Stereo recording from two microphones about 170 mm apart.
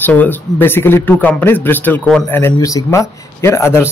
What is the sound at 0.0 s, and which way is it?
A man's voice, 10° left (ahead or behind).